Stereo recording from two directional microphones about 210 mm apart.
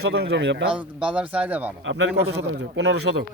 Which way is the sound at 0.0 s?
50° right (ahead or behind).